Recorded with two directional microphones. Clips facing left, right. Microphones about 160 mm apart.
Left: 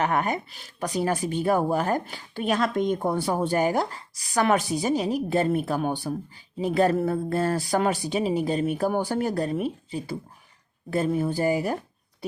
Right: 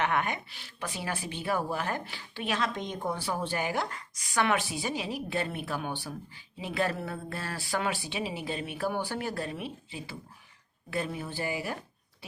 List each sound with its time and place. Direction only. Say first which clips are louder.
0.0 s speech: left 5 dB; 40° left (ahead or behind)